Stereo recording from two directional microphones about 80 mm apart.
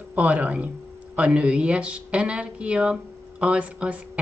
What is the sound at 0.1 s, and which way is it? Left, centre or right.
Speech, centre.